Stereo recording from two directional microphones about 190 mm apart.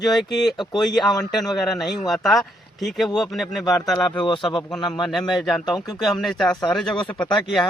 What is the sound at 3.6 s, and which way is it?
Speech, 20° left (ahead or behind).